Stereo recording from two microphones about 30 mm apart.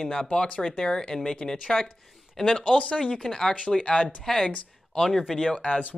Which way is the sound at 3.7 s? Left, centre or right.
Left.